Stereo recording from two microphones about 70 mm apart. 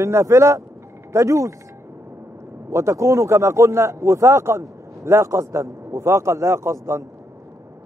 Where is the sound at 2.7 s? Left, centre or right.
Right.